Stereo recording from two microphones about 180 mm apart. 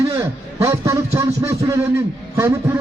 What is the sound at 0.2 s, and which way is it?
A man's voice, 15° right (ahead or behind).